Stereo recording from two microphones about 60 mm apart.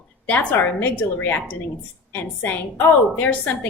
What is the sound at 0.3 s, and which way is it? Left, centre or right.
A woman's voice, left.